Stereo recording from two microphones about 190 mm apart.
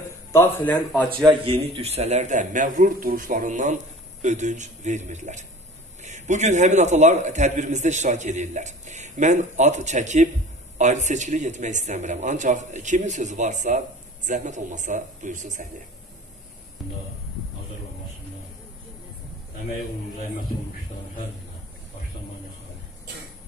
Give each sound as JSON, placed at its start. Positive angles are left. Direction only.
{"t": 0.3, "sound": "speech", "side_deg": 10}
{"t": 1.1, "sound": "speech", "side_deg": -25}